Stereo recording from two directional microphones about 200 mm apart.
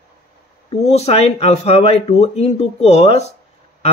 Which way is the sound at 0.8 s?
30° left (ahead or behind).